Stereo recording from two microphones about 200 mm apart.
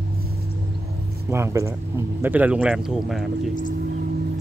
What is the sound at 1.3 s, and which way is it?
Speech, 15° right (ahead or behind).